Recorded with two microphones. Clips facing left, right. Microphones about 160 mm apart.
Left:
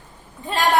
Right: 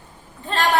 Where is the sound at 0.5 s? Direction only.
10° left (ahead or behind).